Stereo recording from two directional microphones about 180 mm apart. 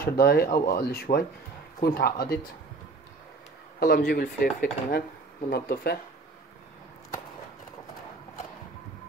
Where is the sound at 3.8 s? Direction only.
55° left (ahead or behind).